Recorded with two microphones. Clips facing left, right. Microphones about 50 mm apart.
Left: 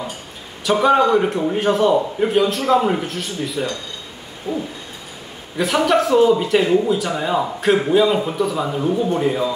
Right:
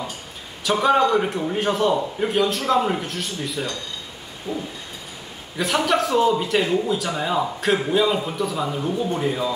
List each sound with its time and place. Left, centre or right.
0.7 s speech: centre